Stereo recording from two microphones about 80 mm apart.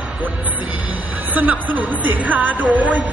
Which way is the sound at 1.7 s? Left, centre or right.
Right.